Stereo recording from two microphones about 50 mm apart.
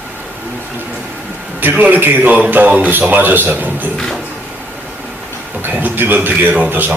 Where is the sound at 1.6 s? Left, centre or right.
Right.